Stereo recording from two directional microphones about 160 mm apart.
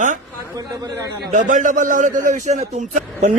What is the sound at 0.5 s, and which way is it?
Speech, 20° right (ahead or behind).